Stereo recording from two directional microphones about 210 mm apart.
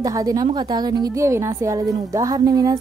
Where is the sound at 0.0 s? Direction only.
15° right (ahead or behind).